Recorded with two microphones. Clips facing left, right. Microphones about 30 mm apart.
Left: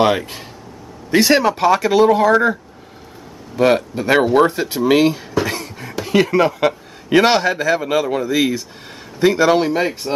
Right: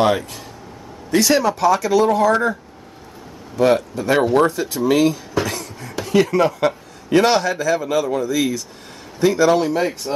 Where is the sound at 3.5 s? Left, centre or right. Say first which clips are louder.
Left 1 dB; left.